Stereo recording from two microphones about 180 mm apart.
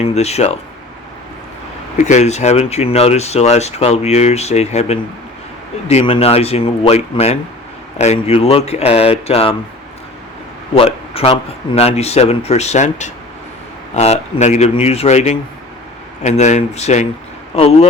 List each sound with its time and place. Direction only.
0.0 s speech: 35° left (ahead or behind)
2.0 s speech: 40° left (ahead or behind)
10.8 s speech: 30° left (ahead or behind)